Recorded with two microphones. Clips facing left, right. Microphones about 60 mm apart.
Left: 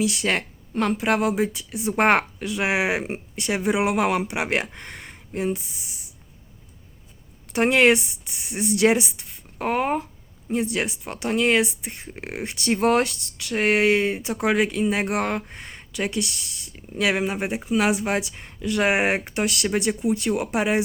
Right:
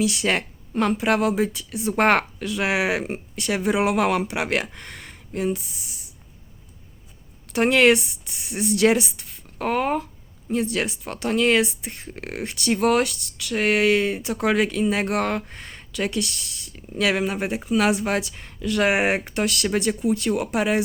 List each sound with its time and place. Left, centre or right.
0.0 s speech: centre
4.4 s speech: left
7.5 s speech: left
12.6 s speech: left
14.3 s speech: centre